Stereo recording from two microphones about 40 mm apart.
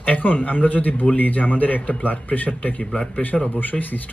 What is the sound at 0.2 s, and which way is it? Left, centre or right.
A man's voice, left.